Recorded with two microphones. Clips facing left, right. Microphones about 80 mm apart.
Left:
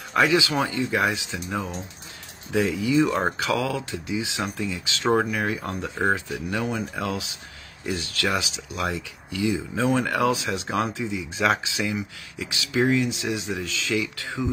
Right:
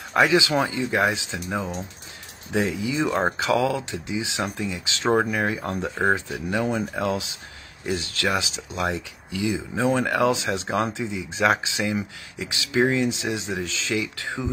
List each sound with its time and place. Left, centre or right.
0.1 s speech: right